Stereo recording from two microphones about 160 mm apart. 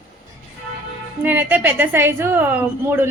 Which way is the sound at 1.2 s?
10° right (ahead or behind).